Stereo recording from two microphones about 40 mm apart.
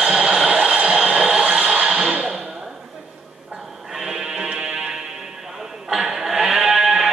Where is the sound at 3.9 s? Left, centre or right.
Centre.